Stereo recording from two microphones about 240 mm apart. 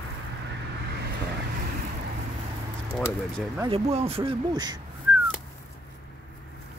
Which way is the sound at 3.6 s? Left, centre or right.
Right.